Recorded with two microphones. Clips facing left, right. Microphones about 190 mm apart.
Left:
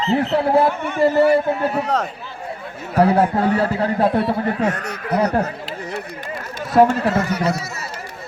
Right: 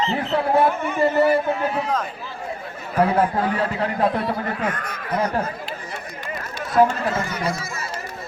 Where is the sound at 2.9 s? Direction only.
40° left (ahead or behind).